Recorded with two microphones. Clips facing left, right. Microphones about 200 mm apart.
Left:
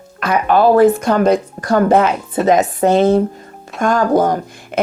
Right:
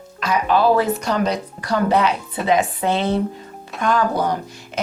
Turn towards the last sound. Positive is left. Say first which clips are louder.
# left 6 dB
turn(degrees=45)  # may be behind; listen again after turning